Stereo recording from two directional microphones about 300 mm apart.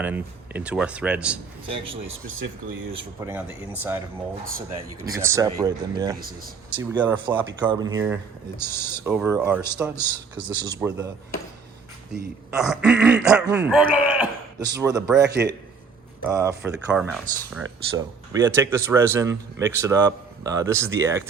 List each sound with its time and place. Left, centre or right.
0.0 s speech: centre
2.9 s a man's voice: centre
6.1 s speech: right
6.7 s a man's voice: centre
8.5 s speech: centre
9.0 s a man's voice: centre
10.3 s speech: right
10.7 s a man's voice: centre
12.5 s a man's voice: centre
15.3 s speech: right
16.2 s a man's voice: centre